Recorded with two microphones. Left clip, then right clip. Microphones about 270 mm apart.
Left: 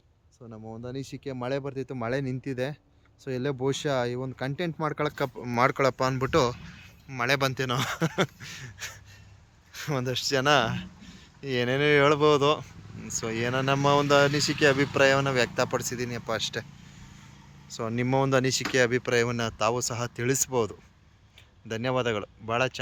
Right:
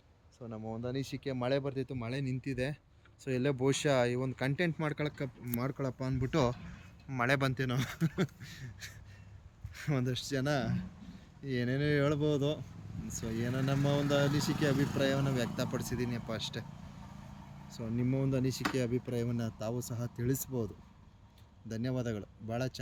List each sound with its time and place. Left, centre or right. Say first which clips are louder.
0.3 s speech: even; centre
5.2 s speech: left 14 dB; left
6.1 s speech: left 8 dB; centre
17.7 s speech: left 10 dB; centre
18.9 s speech: left 9 dB; left
19.2 s speech: left 12 dB; centre
21.7 s speech: left 11 dB; centre